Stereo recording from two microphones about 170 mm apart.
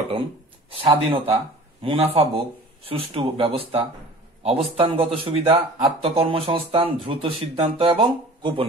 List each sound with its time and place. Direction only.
0.7 s a man's voice: 35° right (ahead or behind)